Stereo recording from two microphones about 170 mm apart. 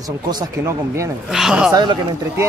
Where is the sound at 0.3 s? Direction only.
20° right (ahead or behind).